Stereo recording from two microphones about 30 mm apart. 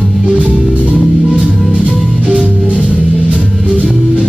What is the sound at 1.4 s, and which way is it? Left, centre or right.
Music, centre.